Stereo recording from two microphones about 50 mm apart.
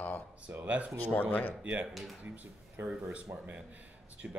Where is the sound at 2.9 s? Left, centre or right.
Centre.